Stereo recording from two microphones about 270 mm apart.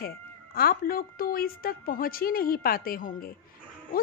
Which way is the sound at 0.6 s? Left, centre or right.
Left.